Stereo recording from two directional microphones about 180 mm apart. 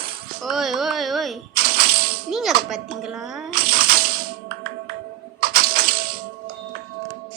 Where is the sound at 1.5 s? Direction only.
55° right (ahead or behind).